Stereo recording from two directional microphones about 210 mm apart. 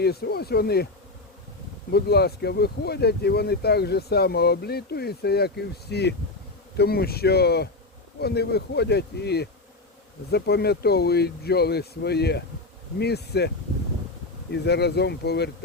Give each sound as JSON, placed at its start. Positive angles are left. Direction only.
{"t": 0.0, "sound": "speech", "side_deg": 50}
{"t": 1.9, "sound": "speech", "side_deg": 50}
{"t": 14.5, "sound": "speech", "side_deg": 55}